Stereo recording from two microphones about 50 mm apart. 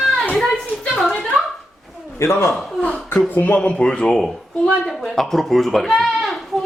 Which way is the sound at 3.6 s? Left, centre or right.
Centre.